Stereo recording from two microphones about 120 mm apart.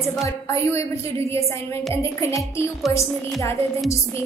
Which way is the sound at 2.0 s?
25° left (ahead or behind).